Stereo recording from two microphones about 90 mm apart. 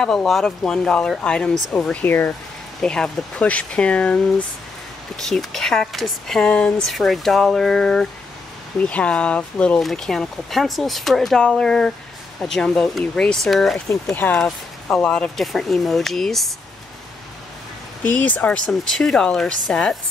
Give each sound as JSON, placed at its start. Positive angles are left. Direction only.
{"t": 0.0, "sound": "speech", "side_deg": 5}
{"t": 2.8, "sound": "speech", "side_deg": 10}
{"t": 6.9, "sound": "speech", "side_deg": 5}
{"t": 9.8, "sound": "speech", "side_deg": 0}
{"t": 18.0, "sound": "speech", "side_deg": 15}
{"t": 18.7, "sound": "speech", "side_deg": 5}